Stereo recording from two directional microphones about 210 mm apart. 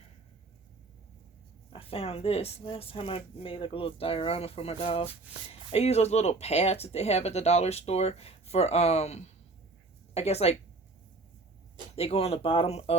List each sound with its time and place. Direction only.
1.7 s speech: 25° left (ahead or behind)
11.9 s speech: 30° left (ahead or behind)